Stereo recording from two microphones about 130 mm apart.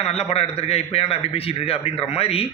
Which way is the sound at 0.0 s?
55° left (ahead or behind).